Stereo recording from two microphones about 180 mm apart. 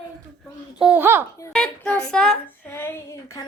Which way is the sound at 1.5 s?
5° left (ahead or behind).